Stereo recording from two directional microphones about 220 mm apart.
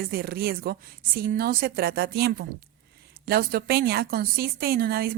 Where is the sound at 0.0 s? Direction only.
45° right (ahead or behind).